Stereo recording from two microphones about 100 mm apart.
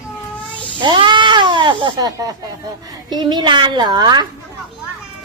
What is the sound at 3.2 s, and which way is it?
A child's voice, 50° right (ahead or behind).